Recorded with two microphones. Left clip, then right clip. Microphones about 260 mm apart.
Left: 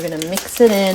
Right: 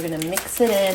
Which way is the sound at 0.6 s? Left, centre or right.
Left.